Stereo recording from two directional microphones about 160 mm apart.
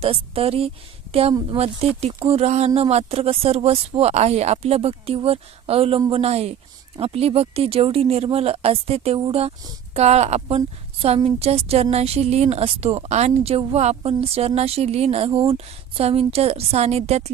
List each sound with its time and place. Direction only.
0.0 s speech: 35° right (ahead or behind)